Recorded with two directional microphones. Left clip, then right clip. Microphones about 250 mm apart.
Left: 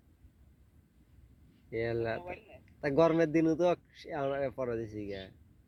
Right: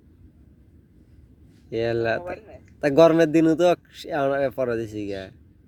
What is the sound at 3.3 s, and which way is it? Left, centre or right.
Speech, right.